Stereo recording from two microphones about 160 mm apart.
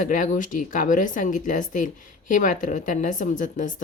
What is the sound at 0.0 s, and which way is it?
A woman's voice, 55° left (ahead or behind).